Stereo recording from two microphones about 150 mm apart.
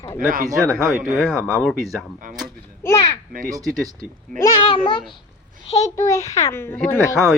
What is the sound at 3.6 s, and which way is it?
Speech, centre (ahead or behind).